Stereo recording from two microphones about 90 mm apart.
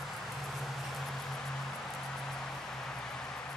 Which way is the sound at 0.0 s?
Centre (ahead or behind).